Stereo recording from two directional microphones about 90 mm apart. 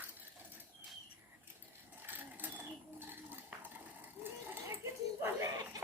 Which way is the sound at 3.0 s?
20° right (ahead or behind).